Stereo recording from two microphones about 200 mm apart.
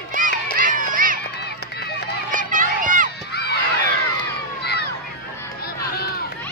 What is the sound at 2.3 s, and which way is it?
Run, 40° right (ahead or behind).